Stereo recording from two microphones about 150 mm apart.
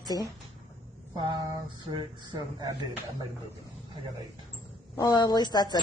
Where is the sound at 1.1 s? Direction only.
30° right (ahead or behind).